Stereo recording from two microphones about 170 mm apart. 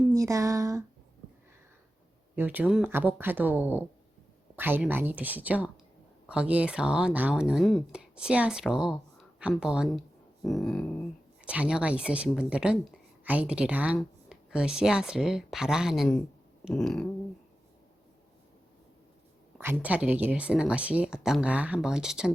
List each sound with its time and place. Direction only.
0.1 s speech: 20° right (ahead or behind)
2.3 s a woman's voice: 10° right (ahead or behind)
19.5 s speech: 10° right (ahead or behind)